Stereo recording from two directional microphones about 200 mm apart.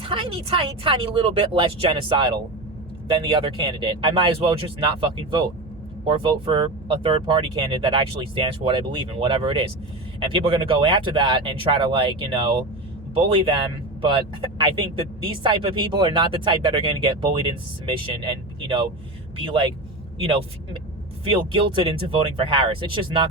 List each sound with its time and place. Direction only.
0.1 s speech: 25° right (ahead or behind)
21.5 s speech: 25° right (ahead or behind)